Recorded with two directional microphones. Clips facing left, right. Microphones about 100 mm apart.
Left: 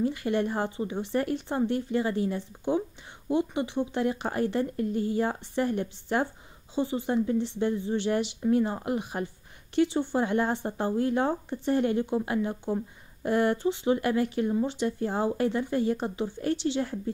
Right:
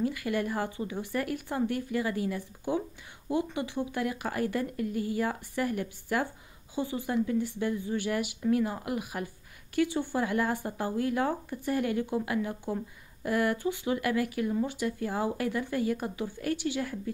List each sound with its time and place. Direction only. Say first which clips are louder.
0.0 s speech: left 3 dB; 30° left (ahead or behind)